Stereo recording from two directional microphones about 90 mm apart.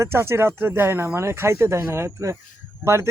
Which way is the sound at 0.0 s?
30° right (ahead or behind).